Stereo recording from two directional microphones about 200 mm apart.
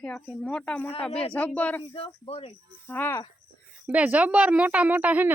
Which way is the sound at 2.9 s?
10° left (ahead or behind).